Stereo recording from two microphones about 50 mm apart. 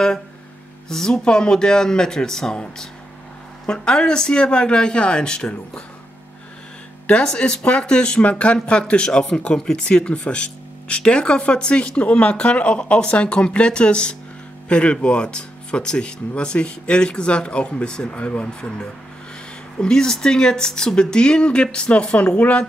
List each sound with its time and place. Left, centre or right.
0.8 s speech: centre
7.2 s speech: left